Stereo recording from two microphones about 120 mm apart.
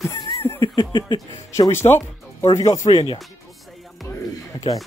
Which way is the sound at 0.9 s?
35° left (ahead or behind).